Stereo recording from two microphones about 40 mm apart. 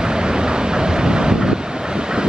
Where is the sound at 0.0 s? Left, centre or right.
Centre.